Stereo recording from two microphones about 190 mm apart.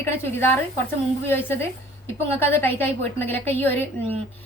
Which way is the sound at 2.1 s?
10° left (ahead or behind).